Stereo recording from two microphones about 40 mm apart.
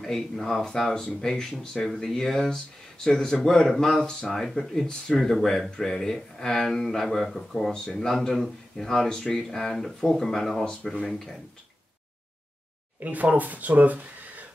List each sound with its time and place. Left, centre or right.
0.0 s speech: centre
4.3 s speech: centre
10.6 s speech: left
11.1 s speech: centre
13.0 s speech: right